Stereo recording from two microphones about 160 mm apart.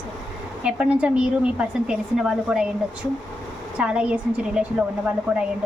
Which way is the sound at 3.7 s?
5° right (ahead or behind).